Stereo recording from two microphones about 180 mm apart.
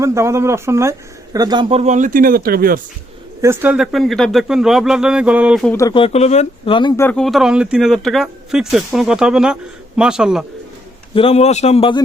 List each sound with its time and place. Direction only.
0.0 s speech: 15° right (ahead or behind); by 2.8 s 55° right (ahead or behind)
3.4 s speech: 10° right (ahead or behind)
5.9 s speech: 35° left (ahead or behind)
6.9 s speech: 10° left (ahead or behind)
11.1 s a man's voice: 30° left (ahead or behind)